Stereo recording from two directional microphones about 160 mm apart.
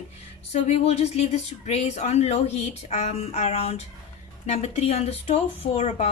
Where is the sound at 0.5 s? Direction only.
45° left (ahead or behind).